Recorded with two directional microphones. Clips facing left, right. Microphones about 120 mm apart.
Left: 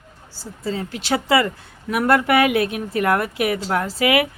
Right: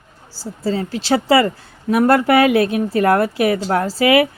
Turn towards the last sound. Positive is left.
turn(degrees=-35)  # may be behind; listen again after turning